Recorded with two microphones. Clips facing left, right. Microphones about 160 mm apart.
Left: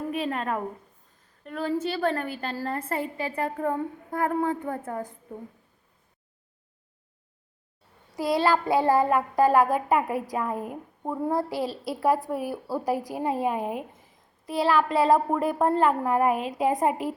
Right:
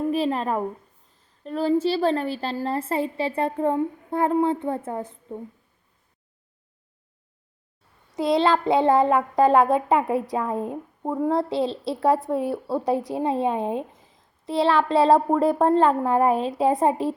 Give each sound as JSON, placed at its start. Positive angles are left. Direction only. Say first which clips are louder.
{"t": 0.1, "sound": "child singing", "louder": "right 5 dB", "side_deg": -30}
{"t": 8.1, "sound": "child singing", "louder": "right 3 dB", "side_deg": -20}